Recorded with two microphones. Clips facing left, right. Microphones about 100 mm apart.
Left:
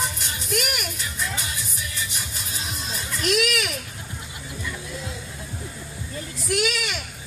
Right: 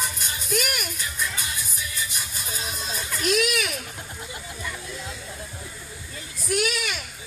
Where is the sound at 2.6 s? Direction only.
20° right (ahead or behind).